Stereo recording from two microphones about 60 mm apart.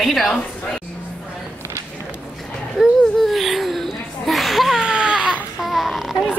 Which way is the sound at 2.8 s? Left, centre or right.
Centre.